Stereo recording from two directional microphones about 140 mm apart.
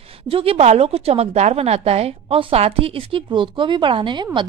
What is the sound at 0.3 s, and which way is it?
A woman's voice, 40° right (ahead or behind).